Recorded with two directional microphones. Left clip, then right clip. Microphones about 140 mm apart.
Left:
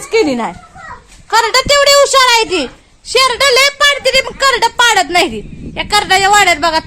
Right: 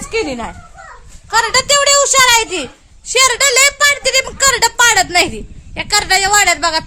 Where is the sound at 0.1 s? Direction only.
65° left (ahead or behind).